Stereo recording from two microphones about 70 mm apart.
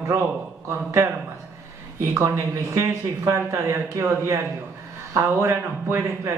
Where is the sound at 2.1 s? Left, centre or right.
Right.